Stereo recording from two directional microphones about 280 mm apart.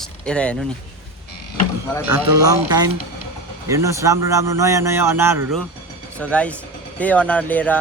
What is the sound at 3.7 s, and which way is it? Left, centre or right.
A man's voice, centre.